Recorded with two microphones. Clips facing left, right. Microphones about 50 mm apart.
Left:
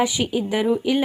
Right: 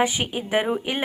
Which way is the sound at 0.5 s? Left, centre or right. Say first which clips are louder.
Left 1 dB; right.